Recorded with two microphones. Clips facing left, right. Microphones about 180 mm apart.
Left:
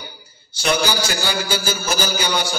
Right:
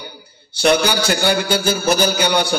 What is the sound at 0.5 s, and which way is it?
A man's voice, 60° right (ahead or behind).